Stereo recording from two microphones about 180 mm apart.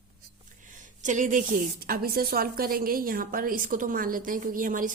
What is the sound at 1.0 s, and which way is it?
A woman's voice, 45° right (ahead or behind).